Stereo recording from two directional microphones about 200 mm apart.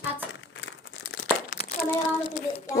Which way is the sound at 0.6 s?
60° left (ahead or behind).